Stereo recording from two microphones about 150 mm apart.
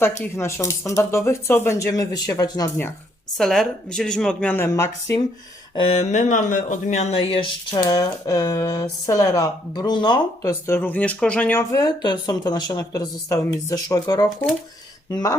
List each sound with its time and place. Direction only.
0.3 s speech: 20° left (ahead or behind)
3.3 s speech: centre (ahead or behind); by 5.2 s 20° left (ahead or behind)
5.7 s speech: 40° left (ahead or behind)
7.8 s speech: 25° left (ahead or behind)
10.7 s speech: 15° left (ahead or behind)
11.7 s speech: 25° left (ahead or behind)